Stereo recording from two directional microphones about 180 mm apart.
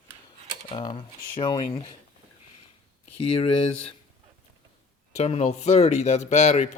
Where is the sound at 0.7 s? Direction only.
30° left (ahead or behind).